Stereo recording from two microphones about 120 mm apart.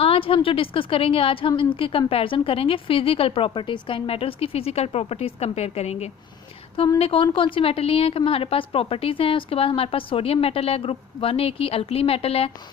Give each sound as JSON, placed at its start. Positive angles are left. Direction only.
{"t": 0.0, "sound": "a woman's voice", "side_deg": 50}
{"t": 7.0, "sound": "a woman's voice", "side_deg": 50}